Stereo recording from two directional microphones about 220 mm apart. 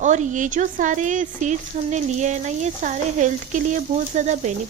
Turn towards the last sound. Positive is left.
turn(degrees=-35)  # may be behind; listen again after turning